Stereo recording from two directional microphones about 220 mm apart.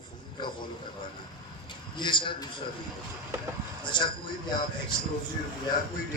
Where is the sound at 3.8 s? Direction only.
20° left (ahead or behind).